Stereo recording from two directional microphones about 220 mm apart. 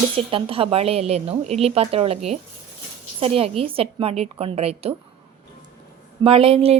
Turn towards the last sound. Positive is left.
turn(degrees=-25)  # may be behind; listen again after turning